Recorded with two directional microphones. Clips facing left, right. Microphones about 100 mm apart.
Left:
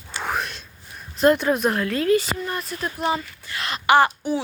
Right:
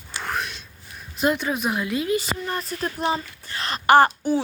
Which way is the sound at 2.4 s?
35° right (ahead or behind).